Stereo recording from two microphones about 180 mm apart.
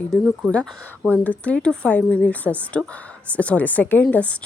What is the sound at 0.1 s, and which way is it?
A woman's voice, centre (ahead or behind).